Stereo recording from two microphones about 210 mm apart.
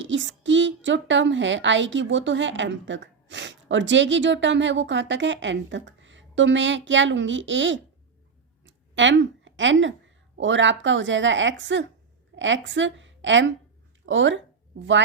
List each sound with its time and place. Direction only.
0.0 s a woman's voice: 60° right (ahead or behind)
8.6 s a sound: 60° right (ahead or behind)
10.3 s a woman's voice: 60° right (ahead or behind)